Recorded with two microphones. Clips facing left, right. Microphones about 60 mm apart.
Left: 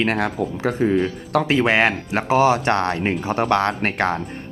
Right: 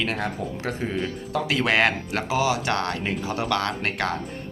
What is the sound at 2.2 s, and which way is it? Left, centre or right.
Speech, left.